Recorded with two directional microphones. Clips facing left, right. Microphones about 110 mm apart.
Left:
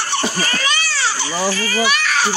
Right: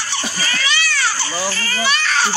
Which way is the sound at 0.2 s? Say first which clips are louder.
Left 3 dB; 40° left (ahead or behind).